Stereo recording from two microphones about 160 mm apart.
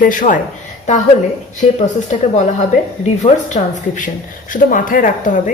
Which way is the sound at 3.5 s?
50° left (ahead or behind).